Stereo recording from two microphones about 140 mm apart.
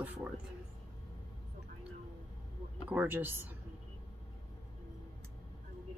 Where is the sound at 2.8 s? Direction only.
15° right (ahead or behind).